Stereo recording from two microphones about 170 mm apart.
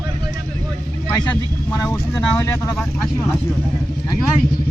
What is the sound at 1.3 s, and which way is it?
Speech, 20° left (ahead or behind).